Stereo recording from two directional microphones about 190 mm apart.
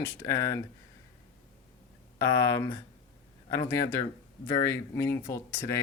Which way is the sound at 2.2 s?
15° left (ahead or behind).